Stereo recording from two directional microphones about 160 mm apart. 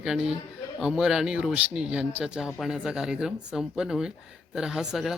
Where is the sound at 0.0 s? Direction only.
5° right (ahead or behind).